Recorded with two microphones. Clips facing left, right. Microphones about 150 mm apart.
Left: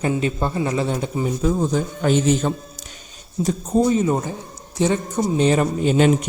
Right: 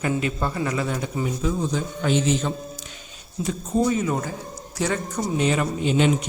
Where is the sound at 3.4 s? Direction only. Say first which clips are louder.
Left 4 dB; 35° left (ahead or behind).